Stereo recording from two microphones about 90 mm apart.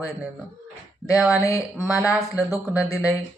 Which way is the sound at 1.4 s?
35° left (ahead or behind).